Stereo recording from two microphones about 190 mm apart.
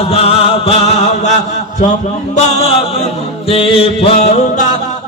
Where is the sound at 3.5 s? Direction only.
30° left (ahead or behind).